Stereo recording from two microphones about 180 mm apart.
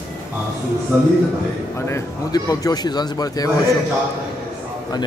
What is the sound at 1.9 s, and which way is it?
Speech, 20° left (ahead or behind).